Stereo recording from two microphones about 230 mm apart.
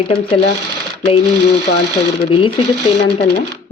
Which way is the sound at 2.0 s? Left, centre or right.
Left.